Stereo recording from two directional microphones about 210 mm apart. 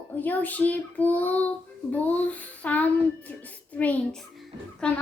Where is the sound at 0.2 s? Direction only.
10° left (ahead or behind).